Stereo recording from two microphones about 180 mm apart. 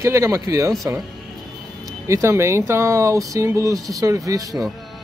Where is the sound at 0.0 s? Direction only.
15° right (ahead or behind).